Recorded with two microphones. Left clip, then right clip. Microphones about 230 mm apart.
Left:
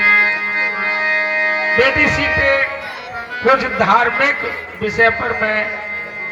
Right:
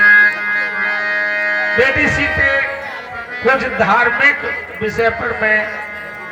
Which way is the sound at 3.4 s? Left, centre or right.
Left.